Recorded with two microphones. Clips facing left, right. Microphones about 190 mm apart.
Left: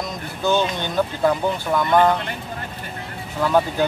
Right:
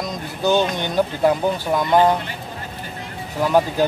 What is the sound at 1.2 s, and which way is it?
Speech, 20° right (ahead or behind).